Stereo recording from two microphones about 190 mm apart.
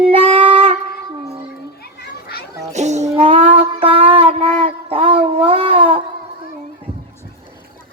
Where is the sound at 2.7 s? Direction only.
35° right (ahead or behind).